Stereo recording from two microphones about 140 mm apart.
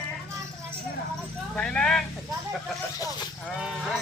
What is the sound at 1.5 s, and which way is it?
Vehicle, 5° left (ahead or behind).